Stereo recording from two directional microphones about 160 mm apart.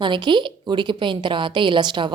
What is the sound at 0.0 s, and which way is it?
A woman's voice, 30° right (ahead or behind).